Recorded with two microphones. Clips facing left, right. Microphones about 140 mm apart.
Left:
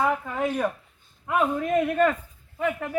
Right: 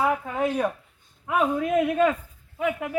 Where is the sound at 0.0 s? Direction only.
10° right (ahead or behind).